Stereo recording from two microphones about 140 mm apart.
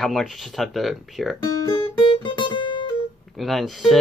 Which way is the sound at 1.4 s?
25° left (ahead or behind).